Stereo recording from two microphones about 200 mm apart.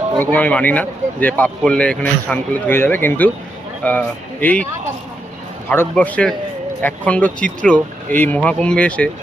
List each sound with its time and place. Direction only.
0.2 s speech: 10° left (ahead or behind)
5.6 s speech: 10° left (ahead or behind)